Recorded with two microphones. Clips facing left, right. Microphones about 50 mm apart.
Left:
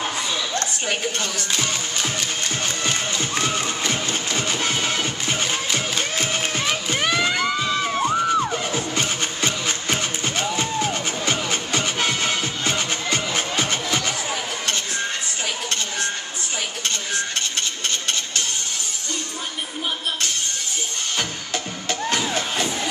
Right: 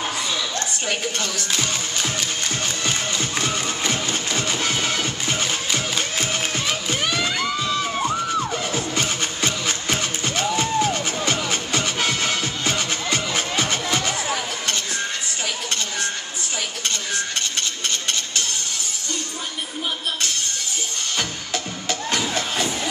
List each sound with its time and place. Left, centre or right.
0.8 s music: centre
6.4 s a sound: centre
7.0 s music: left
8.7 s music: centre
13.9 s a sound: centre
21.8 s music: centre